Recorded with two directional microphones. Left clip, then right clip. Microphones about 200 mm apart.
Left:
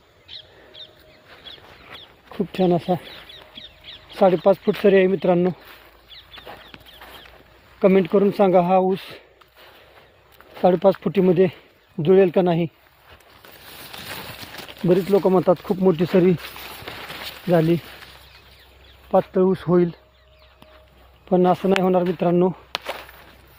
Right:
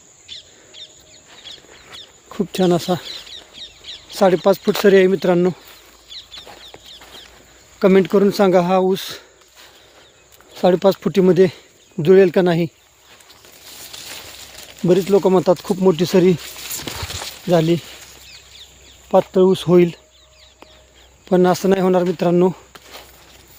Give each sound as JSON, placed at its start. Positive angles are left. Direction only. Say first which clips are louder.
{"t": 0.3, "sound": "bird", "louder": "right 3 dB", "side_deg": -60}
{"t": 2.0, "sound": "a sound", "louder": "right 3 dB", "side_deg": -45}
{"t": 3.8, "sound": "speech", "louder": "right 2 dB", "side_deg": -40}
{"t": 6.3, "sound": "chicken", "louder": "right 2 dB", "side_deg": 50}
{"t": 7.8, "sound": "speech", "louder": "right 3 dB", "side_deg": -40}
{"t": 10.6, "sound": "speech", "louder": "right 2 dB", "side_deg": -40}
{"t": 13.9, "sound": "a sound", "louder": "even", "side_deg": 50}
{"t": 14.8, "sound": "speech", "louder": "right 3 dB", "side_deg": -40}
{"t": 16.9, "sound": "a sound", "louder": "right 6 dB", "side_deg": 35}
{"t": 17.5, "sound": "speech", "louder": "right 3 dB", "side_deg": -35}
{"t": 19.1, "sound": "speech", "louder": "right 5 dB", "side_deg": -50}
{"t": 21.2, "sound": "speech", "louder": "right 3 dB", "side_deg": -45}